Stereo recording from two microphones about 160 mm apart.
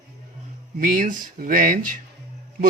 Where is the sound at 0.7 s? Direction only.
55° right (ahead or behind).